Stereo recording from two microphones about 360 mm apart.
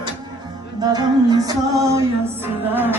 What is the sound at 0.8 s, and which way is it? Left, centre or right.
Music, centre.